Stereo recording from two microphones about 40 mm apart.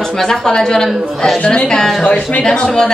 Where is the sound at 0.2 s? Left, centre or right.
Centre.